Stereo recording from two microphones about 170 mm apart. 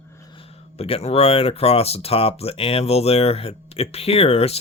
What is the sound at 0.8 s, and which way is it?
Speech, 35° left (ahead or behind).